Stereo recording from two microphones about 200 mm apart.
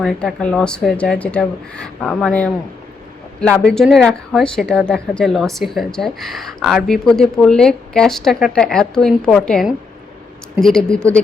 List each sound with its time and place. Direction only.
0.0 s a woman's voice: 5° left (ahead or behind)